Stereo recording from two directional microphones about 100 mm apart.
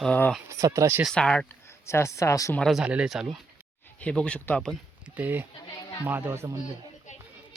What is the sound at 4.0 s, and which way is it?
Speech, 10° left (ahead or behind).